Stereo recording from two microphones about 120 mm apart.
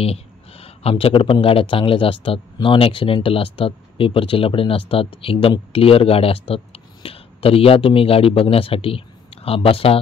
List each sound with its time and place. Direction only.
0.0 s speech: 55° left (ahead or behind)